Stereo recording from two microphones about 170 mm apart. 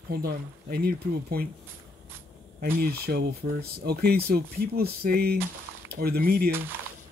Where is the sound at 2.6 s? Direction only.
60° right (ahead or behind).